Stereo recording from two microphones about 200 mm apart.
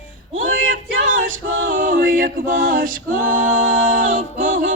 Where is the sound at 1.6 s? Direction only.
45° right (ahead or behind).